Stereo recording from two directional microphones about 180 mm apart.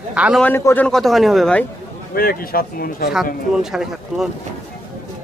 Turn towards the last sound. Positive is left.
turn(degrees=0)  # may be behind; listen again after turning